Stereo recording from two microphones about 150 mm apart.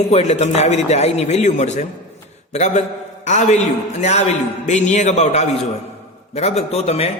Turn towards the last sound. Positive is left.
turn(degrees=45)  # may be behind; listen again after turning